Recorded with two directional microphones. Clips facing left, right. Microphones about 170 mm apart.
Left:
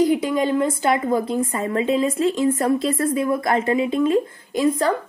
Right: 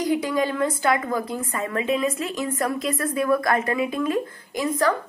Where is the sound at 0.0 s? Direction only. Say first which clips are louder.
Left 4 dB; 25° left (ahead or behind).